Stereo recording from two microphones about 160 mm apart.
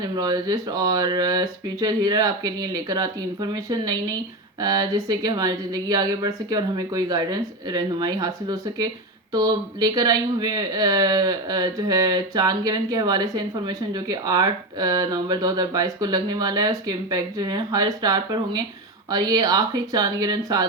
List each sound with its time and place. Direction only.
0.0 s speech: 25° right (ahead or behind)